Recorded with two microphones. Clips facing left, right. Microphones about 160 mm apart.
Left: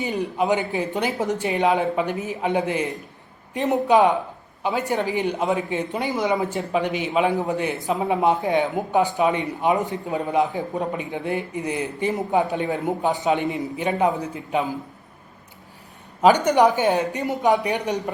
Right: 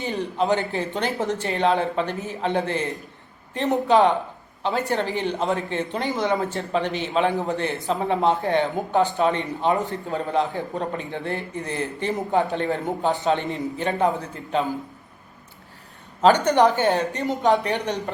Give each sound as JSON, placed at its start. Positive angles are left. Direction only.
{"t": 0.3, "sound": "a man's voice", "side_deg": 15}
{"t": 16.2, "sound": "a man's voice", "side_deg": 10}